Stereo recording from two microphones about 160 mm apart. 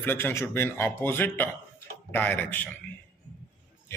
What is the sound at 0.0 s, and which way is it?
Speech, 15° left (ahead or behind).